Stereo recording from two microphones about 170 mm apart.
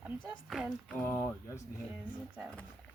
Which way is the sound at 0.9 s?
15° left (ahead or behind).